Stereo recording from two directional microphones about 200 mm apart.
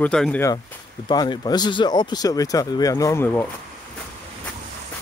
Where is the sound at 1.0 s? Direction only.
20° left (ahead or behind).